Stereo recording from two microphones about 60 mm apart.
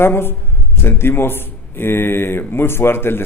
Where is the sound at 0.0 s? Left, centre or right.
Left.